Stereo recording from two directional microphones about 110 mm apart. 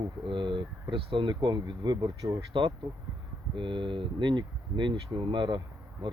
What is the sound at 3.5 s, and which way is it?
Speech, 50° right (ahead or behind).